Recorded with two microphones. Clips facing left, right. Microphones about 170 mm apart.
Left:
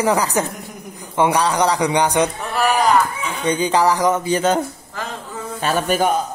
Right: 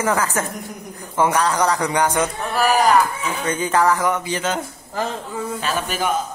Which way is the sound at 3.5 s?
15° left (ahead or behind).